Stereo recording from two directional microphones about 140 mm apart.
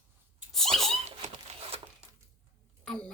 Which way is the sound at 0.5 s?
Centre (ahead or behind).